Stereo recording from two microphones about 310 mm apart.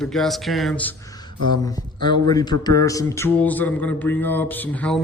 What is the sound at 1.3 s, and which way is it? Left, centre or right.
Speech, right.